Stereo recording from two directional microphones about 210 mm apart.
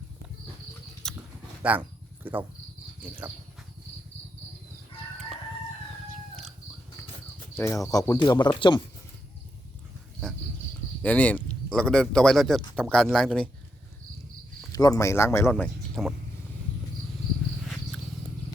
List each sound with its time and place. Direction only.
1.0 s a sound: 5° left (ahead or behind)
1.6 s speech: 5° right (ahead or behind)
7.5 s speech: 15° left (ahead or behind)
11.0 s speech: 5° left (ahead or behind)
14.7 s speech: 20° left (ahead or behind)